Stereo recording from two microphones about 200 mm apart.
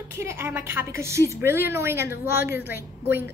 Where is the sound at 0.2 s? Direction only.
15° right (ahead or behind).